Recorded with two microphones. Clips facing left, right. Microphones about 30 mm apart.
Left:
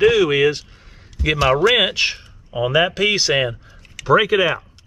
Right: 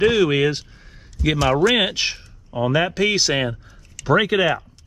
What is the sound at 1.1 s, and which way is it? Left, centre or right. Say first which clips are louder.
Speech: left 2 dB; left.